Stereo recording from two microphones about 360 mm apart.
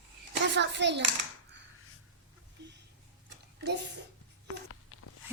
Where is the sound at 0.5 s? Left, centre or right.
Right.